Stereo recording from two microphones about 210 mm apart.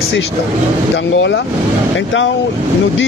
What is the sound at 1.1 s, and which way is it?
Speech, 60° left (ahead or behind).